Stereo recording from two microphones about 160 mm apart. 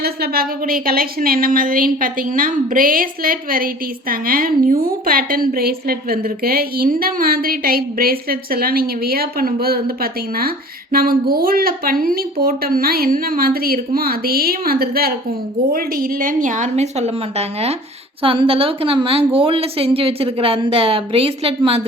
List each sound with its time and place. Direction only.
0.0 s a woman's voice: 70° right (ahead or behind); by 21.8 s 35° right (ahead or behind)